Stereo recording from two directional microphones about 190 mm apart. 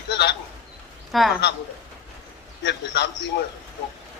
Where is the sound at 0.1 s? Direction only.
60° left (ahead or behind).